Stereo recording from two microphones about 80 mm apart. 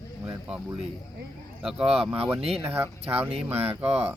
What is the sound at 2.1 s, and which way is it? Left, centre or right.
Speech, right.